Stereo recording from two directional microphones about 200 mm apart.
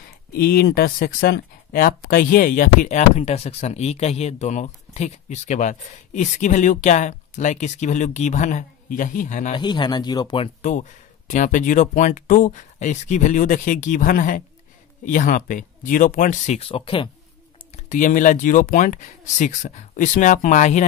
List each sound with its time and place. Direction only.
0.3 s speech: 45° left (ahead or behind)
9.6 s speech: 20° left (ahead or behind)
10.6 s speech: 40° left (ahead or behind)
17.8 s speech: 40° left (ahead or behind)